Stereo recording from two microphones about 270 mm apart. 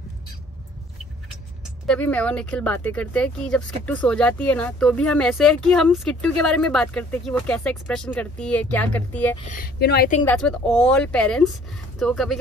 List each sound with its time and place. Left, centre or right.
1.9 s speech: centre
9.5 s speech: left
10.2 s speech: centre